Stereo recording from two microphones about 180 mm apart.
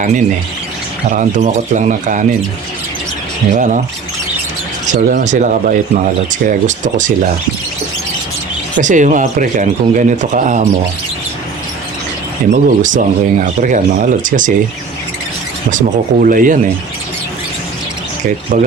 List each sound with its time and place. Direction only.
1.1 s speech: 40° right (ahead or behind)
3.5 s speech: 45° right (ahead or behind)
4.9 s speech: 45° right (ahead or behind)
8.8 s speech: 45° right (ahead or behind)
12.5 s speech: 45° right (ahead or behind)
15.7 s speech: 50° right (ahead or behind)
18.5 s speech: 45° right (ahead or behind)